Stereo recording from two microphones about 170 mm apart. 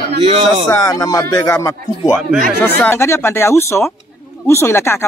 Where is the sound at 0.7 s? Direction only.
20° left (ahead or behind).